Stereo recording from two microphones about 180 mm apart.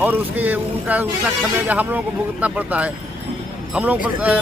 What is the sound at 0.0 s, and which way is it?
Speech, 10° right (ahead or behind).